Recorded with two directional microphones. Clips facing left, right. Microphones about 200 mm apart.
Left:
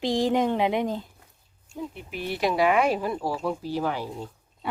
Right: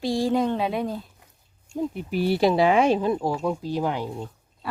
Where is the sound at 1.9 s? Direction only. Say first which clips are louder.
Right 8 dB; 35° right (ahead or behind); by 4.1 s 15° right (ahead or behind).